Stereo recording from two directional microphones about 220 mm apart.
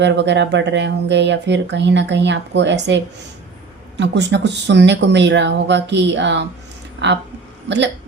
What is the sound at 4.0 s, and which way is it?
A woman's voice, 50° right (ahead or behind).